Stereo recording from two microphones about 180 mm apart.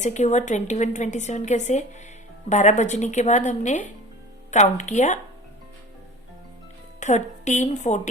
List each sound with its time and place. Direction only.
0.0 s a woman's voice: 40° left (ahead or behind)
7.0 s a woman's voice: 40° left (ahead or behind)